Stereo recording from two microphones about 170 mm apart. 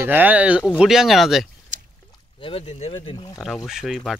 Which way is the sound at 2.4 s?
30° left (ahead or behind).